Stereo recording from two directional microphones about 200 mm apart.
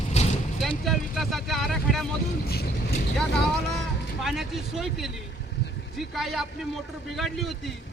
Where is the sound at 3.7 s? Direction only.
Centre (ahead or behind).